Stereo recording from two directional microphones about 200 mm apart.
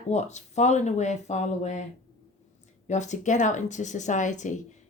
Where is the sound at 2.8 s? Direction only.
35° left (ahead or behind).